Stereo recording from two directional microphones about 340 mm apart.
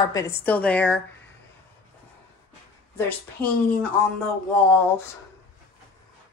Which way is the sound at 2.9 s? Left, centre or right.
Centre.